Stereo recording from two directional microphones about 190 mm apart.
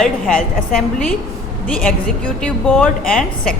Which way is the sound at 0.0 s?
5° left (ahead or behind).